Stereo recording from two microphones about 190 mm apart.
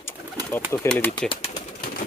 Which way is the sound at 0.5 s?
10° left (ahead or behind).